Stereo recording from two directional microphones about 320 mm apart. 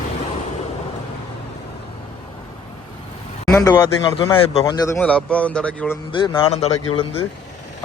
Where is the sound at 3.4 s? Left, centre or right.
Centre.